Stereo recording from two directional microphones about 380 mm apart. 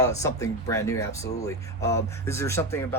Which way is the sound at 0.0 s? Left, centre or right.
Centre.